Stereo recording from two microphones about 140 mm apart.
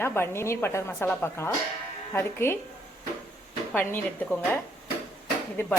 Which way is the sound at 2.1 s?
20° left (ahead or behind).